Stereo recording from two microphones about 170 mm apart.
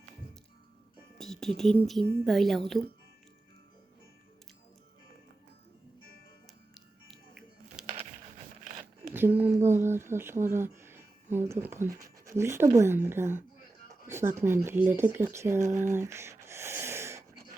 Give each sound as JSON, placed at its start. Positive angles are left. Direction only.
{"t": 1.2, "sound": "speech", "side_deg": 0}
{"t": 7.1, "sound": "music", "side_deg": 0}
{"t": 9.1, "sound": "speech", "side_deg": -10}
{"t": 15.4, "sound": "a sound", "side_deg": -15}